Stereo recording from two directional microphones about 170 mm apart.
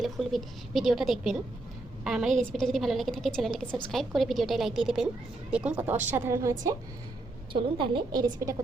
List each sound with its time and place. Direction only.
0.0 s a woman's voice: centre (ahead or behind); by 6.6 s 15° right (ahead or behind)
7.5 s a woman's voice: 30° right (ahead or behind)